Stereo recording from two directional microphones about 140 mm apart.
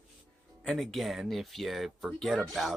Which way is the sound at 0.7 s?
Centre (ahead or behind).